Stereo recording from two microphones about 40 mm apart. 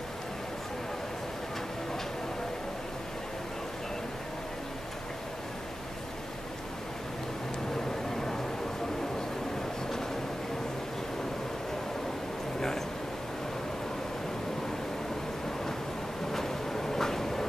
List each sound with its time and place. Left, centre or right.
7.7 s vehicle: centre
12.5 s a sound: centre
16.3 s vehicle: centre